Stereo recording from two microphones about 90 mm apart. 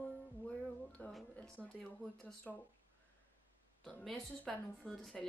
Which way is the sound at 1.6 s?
Centre (ahead or behind).